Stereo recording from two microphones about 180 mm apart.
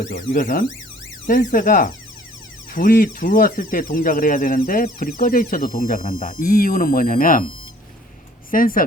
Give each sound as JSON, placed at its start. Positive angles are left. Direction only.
{"t": 0.0, "sound": "speech", "side_deg": 45}
{"t": 8.4, "sound": "speech", "side_deg": 50}